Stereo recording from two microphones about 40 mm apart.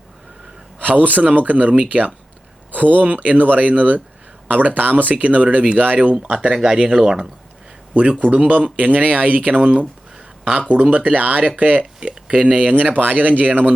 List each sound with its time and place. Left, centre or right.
0.8 s a man's voice: right
6.1 s speech: right
8.3 s speech: right